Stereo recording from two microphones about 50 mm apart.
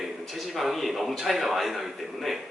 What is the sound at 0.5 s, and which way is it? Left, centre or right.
A man's voice, centre.